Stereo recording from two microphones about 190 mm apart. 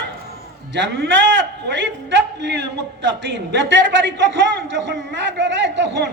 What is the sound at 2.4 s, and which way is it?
Speech, 65° right (ahead or behind).